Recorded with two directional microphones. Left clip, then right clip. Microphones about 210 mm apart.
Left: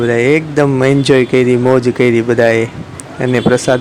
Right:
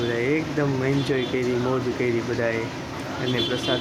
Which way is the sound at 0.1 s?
50° left (ahead or behind).